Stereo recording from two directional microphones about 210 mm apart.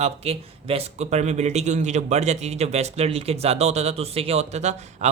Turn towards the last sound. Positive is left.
turn(degrees=-35)  # may be behind; listen again after turning